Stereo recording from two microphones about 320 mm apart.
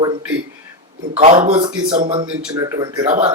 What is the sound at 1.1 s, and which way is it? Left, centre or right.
Speech, centre.